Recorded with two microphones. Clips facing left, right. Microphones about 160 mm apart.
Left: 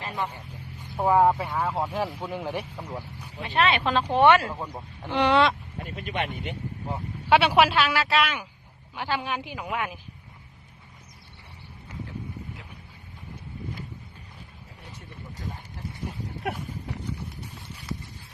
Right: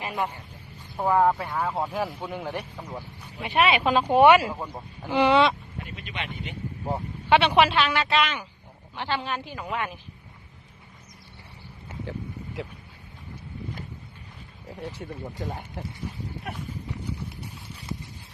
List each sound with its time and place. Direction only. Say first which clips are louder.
0.0 s vehicle: right 2 dB; 15° right (ahead or behind)
0.9 s speech: left 1 dB; 10° left (ahead or behind)
3.4 s speech: right 2 dB; 10° right (ahead or behind)
5.8 s speech: left 6 dB; 45° left (ahead or behind)
7.3 s a woman's voice: even; 5° left (ahead or behind)
14.7 s speech: right 13 dB; 90° right
15.4 s speech: right 2 dB; 45° right (ahead or behind)